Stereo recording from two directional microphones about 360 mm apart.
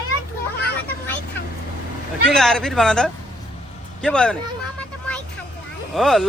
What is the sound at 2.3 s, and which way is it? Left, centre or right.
Speech, centre.